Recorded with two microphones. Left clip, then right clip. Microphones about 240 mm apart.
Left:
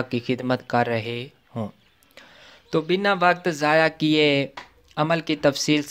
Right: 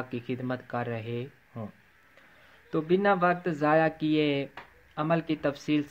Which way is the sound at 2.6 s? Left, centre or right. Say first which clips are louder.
Left 4 dB; left.